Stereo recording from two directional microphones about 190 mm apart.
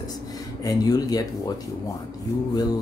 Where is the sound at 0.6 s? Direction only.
20° left (ahead or behind).